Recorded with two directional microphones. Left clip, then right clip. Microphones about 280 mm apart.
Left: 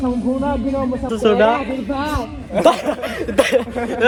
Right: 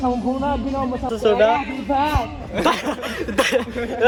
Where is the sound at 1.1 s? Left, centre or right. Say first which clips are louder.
Left 2 dB; centre.